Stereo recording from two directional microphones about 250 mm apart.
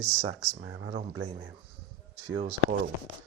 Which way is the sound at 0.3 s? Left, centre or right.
Right.